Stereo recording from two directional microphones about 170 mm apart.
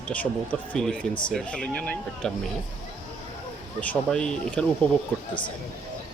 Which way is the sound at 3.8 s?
5° left (ahead or behind).